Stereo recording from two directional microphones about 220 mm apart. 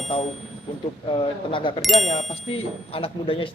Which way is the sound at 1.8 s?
Centre (ahead or behind).